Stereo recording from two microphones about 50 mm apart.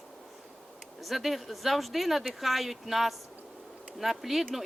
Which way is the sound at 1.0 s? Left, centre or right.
Centre.